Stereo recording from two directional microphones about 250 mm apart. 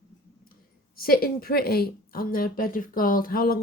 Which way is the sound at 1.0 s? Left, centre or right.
Left.